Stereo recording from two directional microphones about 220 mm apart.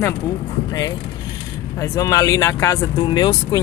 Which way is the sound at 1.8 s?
15° left (ahead or behind).